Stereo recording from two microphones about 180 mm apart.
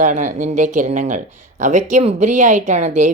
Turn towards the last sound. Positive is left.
turn(degrees=-40)  # may be behind; listen again after turning